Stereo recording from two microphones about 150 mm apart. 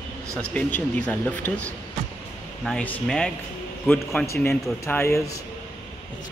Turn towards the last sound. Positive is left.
turn(degrees=20)  # may be behind; listen again after turning